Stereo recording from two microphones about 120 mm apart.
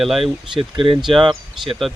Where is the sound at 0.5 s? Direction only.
45° right (ahead or behind).